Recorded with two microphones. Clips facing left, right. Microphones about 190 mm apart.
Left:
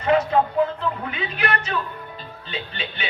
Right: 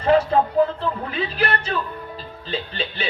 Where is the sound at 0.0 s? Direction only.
35° right (ahead or behind).